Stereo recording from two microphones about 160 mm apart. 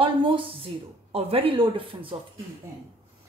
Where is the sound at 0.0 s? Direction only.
30° right (ahead or behind).